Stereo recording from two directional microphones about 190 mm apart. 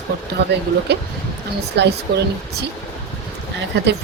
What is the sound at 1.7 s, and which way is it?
Speech, 60° right (ahead or behind).